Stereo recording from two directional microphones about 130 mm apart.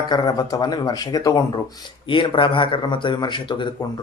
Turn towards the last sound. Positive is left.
turn(degrees=40)  # may be behind; listen again after turning